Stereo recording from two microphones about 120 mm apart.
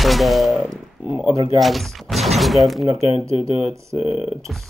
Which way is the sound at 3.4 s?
55° left (ahead or behind).